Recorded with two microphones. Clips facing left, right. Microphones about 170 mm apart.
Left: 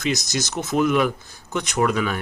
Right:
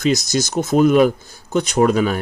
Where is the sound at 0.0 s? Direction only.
30° right (ahead or behind).